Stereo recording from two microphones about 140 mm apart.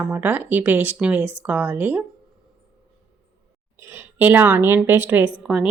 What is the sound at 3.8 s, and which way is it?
Speech, 20° right (ahead or behind).